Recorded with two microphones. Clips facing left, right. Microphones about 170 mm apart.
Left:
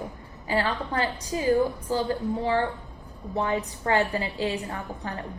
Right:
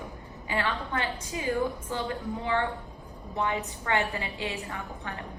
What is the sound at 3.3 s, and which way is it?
A woman's voice, 35° left (ahead or behind).